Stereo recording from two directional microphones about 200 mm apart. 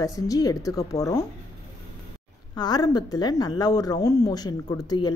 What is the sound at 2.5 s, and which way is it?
Speech, 20° left (ahead or behind).